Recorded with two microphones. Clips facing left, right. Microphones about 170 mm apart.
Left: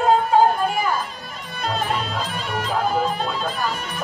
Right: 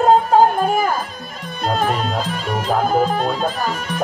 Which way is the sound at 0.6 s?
45° right (ahead or behind).